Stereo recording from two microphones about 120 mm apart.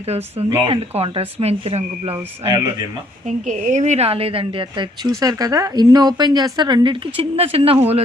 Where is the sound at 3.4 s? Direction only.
90° right.